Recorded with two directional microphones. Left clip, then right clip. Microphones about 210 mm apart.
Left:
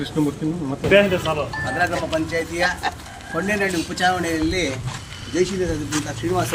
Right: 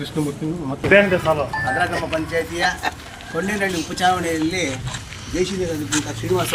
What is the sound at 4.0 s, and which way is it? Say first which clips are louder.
Speech: right 2 dB; 5° right (ahead or behind).